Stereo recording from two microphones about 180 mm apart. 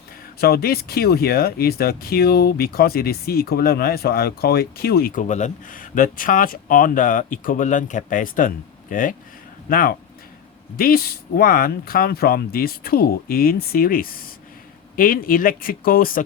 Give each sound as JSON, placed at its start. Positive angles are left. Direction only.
{"t": 0.3, "sound": "speech", "side_deg": 60}